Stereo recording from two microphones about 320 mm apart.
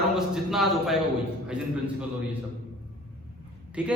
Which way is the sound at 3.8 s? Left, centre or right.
Centre.